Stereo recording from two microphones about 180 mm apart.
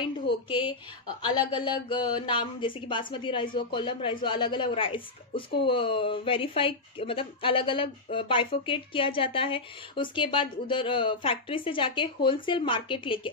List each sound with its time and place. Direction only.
0.0 s a woman's voice: 25° left (ahead or behind)